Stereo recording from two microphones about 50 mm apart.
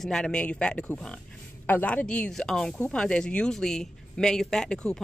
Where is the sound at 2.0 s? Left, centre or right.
Left.